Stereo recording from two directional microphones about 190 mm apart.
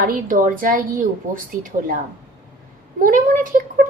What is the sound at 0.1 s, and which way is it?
Speech, 45° right (ahead or behind).